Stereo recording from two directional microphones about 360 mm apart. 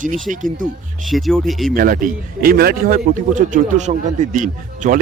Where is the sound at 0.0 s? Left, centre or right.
Right.